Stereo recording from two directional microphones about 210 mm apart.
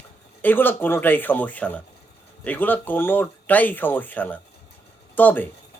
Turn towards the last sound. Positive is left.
turn(degrees=10)  # may be behind; listen again after turning